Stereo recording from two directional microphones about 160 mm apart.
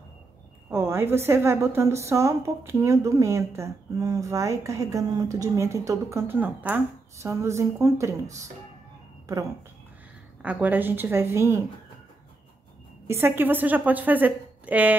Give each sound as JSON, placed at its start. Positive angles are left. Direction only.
{"t": 0.7, "sound": "a woman's voice", "side_deg": -15}
{"t": 10.4, "sound": "a woman's voice", "side_deg": -10}
{"t": 13.0, "sound": "a woman's voice", "side_deg": -15}